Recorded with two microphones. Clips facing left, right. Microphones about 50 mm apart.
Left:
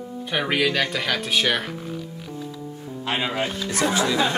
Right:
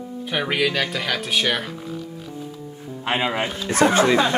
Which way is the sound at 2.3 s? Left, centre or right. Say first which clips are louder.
Left 1 dB; centre.